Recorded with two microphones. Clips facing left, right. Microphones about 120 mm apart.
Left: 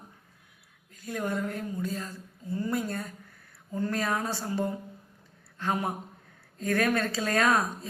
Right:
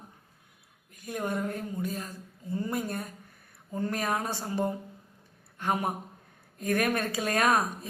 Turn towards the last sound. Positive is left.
turn(degrees=-20)  # may be behind; listen again after turning